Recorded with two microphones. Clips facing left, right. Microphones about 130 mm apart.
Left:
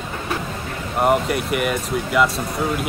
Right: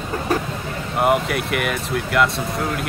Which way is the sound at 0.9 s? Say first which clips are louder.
Even; centre (ahead or behind).